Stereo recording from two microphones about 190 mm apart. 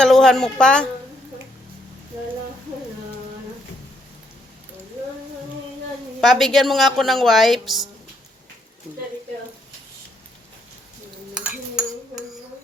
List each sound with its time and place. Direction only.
0.0 s a woman's voice: centre (ahead or behind)
6.1 s a woman's voice: centre (ahead or behind)
11.3 s dishes: centre (ahead or behind)